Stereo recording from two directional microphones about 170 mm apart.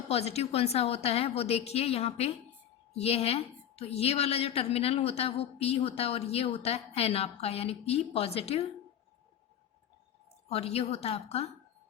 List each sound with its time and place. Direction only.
0.1 s a woman's voice: 40° left (ahead or behind)
10.5 s a woman's voice: 35° left (ahead or behind)